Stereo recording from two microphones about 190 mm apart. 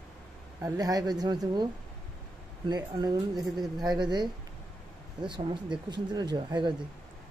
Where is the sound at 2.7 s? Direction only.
20° right (ahead or behind).